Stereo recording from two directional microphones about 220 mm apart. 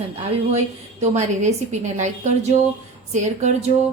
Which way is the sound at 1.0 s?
30° right (ahead or behind).